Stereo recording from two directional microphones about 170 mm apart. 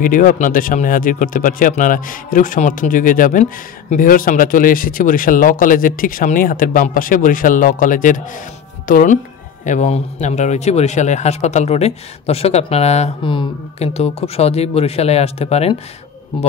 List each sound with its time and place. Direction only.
0.0 s a man's voice: 55° left (ahead or behind)
13.2 s a man's voice: 30° left (ahead or behind)